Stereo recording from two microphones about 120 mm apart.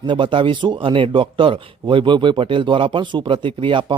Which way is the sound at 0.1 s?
45° right (ahead or behind).